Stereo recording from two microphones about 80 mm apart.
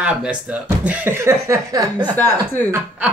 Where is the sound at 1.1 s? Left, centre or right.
Right.